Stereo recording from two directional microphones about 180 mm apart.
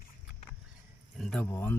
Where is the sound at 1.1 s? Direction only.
5° left (ahead or behind).